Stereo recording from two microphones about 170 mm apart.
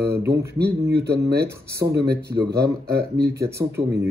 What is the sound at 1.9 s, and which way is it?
Speech, 70° right (ahead or behind).